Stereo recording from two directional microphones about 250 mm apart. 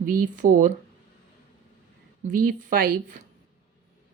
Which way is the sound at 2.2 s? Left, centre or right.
Right.